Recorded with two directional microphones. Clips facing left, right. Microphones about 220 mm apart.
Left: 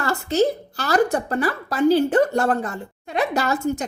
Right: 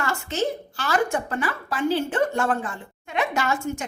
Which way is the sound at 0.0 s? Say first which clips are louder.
Left 6 dB; 35° left (ahead or behind).